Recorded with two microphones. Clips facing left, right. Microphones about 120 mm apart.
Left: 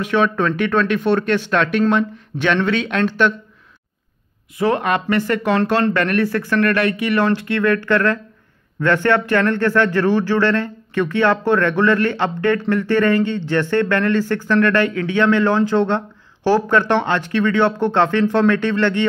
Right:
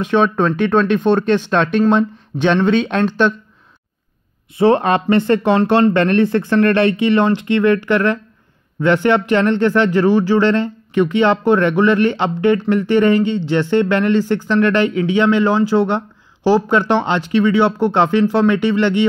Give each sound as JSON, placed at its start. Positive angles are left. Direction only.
{"t": 0.0, "sound": "speech", "side_deg": -25}
{"t": 4.6, "sound": "speech", "side_deg": -30}